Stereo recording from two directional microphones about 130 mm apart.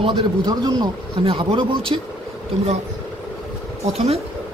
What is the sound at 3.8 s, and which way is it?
Speech, 55° right (ahead or behind).